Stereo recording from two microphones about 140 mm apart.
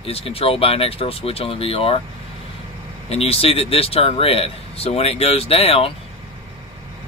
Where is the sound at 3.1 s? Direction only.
45° left (ahead or behind).